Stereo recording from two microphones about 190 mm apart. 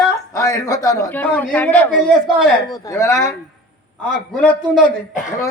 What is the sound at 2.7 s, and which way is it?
Speech, 15° left (ahead or behind).